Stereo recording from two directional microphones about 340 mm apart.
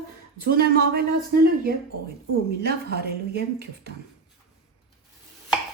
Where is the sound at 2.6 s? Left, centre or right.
Right.